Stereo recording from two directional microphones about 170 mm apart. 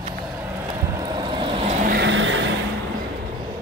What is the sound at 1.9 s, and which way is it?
Vehicle, 85° right.